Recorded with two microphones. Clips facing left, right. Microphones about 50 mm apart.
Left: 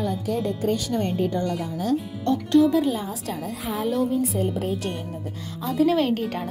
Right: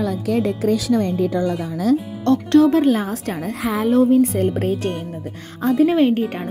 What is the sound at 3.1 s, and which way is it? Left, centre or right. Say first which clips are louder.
Speech: right 5 dB; right.